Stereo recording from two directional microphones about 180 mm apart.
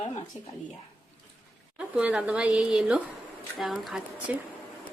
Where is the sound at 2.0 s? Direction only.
5° right (ahead or behind).